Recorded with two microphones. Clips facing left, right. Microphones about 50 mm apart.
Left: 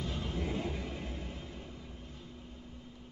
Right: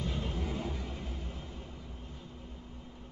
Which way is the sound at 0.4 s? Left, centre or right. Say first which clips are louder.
Left 1 dB; left.